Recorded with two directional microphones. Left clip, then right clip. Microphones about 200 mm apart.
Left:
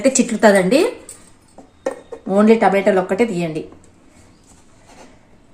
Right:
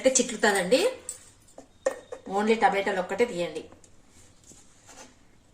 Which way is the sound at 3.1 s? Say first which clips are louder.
Left 8 dB; 55° left (ahead or behind).